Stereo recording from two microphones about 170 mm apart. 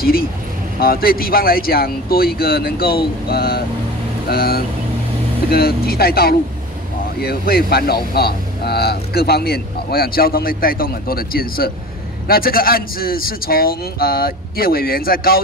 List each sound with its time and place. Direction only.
0.7 s speech: 60° left (ahead or behind)